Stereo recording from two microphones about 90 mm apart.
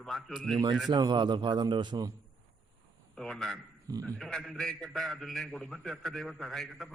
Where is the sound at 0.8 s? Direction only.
50° right (ahead or behind).